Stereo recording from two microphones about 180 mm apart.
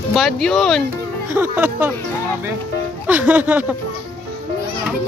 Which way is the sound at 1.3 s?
10° right (ahead or behind).